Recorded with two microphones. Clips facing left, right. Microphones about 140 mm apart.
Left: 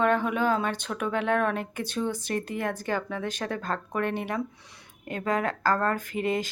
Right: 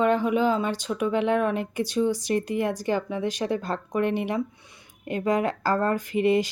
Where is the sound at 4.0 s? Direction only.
50° left (ahead or behind).